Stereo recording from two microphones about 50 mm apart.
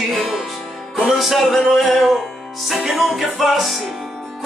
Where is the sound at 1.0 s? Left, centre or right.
Centre.